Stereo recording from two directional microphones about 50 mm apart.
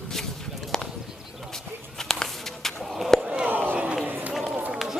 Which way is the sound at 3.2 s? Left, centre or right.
Centre.